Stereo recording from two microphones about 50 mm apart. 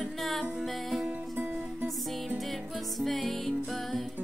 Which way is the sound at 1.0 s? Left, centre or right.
Right.